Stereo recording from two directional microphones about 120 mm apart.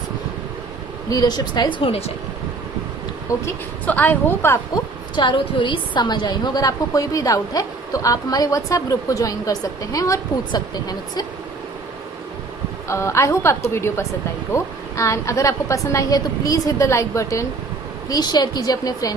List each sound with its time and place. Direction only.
1.1 s a woman's voice: 35° left (ahead or behind)
1.8 s speech: 55° left (ahead or behind)
3.4 s a woman's voice: 15° left (ahead or behind)
4.7 s a woman's voice: 40° left (ahead or behind)
12.9 s a woman's voice: 25° left (ahead or behind)